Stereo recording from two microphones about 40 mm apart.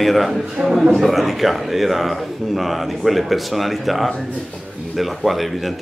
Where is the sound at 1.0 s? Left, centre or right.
Centre.